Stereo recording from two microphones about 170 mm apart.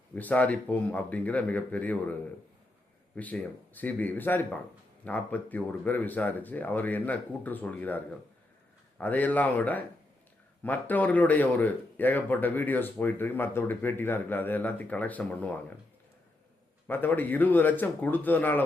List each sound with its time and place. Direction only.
0.2 s speech: 10° left (ahead or behind)
3.2 s speech: 10° left (ahead or behind)
16.8 s speech: 10° left (ahead or behind)